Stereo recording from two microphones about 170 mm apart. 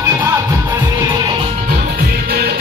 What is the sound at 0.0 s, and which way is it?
Music, 15° right (ahead or behind).